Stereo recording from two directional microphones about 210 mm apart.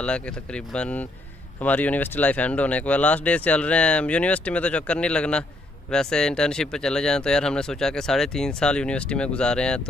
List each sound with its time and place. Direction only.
0.0 s speech: 5° left (ahead or behind)